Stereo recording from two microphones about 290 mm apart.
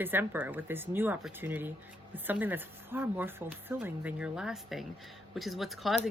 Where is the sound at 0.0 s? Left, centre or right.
Centre.